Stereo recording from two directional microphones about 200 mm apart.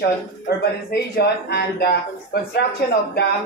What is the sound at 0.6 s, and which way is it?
Speech, 50° left (ahead or behind).